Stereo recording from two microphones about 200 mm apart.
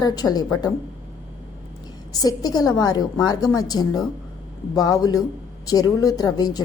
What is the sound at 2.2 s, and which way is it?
A woman's voice, 20° left (ahead or behind).